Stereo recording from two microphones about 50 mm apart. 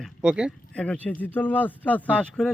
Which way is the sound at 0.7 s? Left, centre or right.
Left.